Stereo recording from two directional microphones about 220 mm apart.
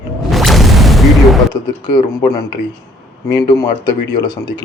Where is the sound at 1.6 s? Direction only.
20° left (ahead or behind).